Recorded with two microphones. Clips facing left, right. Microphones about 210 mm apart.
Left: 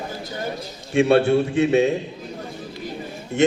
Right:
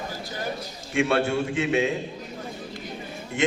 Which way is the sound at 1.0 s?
30° left (ahead or behind).